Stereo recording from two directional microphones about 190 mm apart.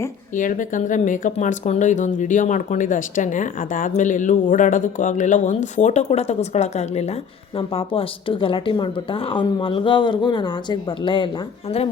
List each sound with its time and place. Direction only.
0.3 s a woman's voice: 45° left (ahead or behind); by 11.3 s 25° left (ahead or behind)